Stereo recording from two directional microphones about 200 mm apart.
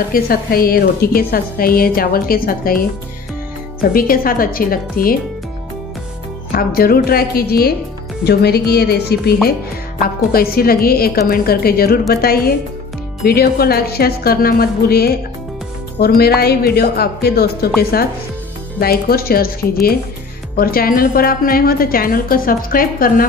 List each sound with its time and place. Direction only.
0.1 s a woman's voice: 50° left (ahead or behind)
3.9 s a woman's voice: 45° left (ahead or behind)
6.5 s a woman's voice: 50° left (ahead or behind)